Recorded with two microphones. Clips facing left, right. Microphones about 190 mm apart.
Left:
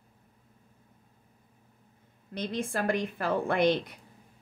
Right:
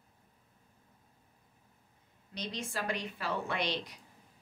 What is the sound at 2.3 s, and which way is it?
Speech, 55° left (ahead or behind).